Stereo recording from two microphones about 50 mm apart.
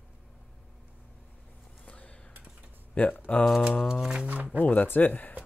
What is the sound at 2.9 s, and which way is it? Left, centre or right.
Speech, left.